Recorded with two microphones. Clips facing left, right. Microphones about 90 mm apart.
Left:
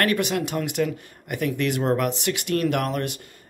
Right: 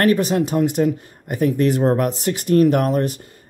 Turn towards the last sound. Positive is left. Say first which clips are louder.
# right 7 dB
turn(degrees=-35)  # may be behind; listen again after turning